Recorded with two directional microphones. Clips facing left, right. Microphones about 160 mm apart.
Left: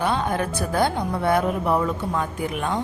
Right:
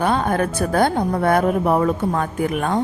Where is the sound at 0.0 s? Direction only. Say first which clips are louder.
Right 4 dB; 50° right (ahead or behind).